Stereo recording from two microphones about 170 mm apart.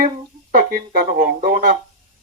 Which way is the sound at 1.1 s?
60° right (ahead or behind).